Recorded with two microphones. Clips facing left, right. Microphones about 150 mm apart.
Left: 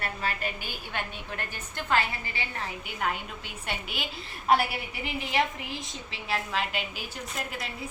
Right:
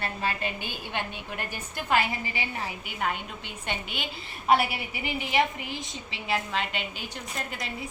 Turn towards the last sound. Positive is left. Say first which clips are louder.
# even
turn(degrees=5)  # may be behind; listen again after turning